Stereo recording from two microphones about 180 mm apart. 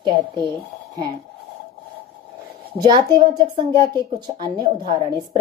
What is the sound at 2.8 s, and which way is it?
A woman's voice, 25° right (ahead or behind).